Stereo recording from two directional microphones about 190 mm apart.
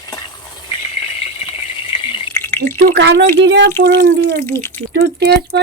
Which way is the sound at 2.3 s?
10° left (ahead or behind).